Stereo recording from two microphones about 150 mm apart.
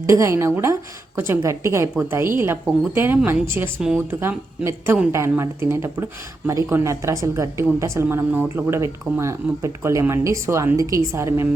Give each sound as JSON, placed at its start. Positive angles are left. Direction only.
{"t": 0.0, "sound": "a woman's voice", "side_deg": -20}